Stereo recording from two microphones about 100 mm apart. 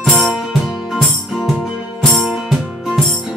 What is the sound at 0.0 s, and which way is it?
Music, 5° left (ahead or behind).